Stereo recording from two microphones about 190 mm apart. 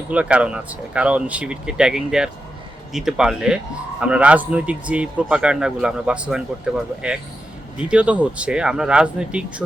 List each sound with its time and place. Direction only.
0.1 s a man's voice: 5° right (ahead or behind)
7.9 s speech: 5° right (ahead or behind)